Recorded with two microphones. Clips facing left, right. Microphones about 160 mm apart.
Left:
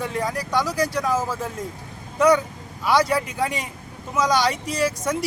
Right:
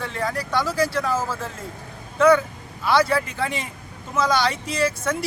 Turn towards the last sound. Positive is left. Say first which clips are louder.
# even
turn(degrees=10)  # may be behind; listen again after turning